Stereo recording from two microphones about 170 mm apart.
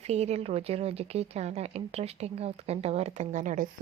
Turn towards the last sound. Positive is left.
turn(degrees=-45)  # may be behind; listen again after turning